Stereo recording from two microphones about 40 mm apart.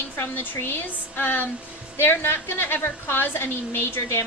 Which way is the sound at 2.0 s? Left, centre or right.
Left.